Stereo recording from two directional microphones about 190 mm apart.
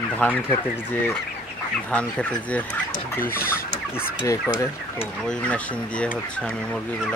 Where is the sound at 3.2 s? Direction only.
50° left (ahead or behind).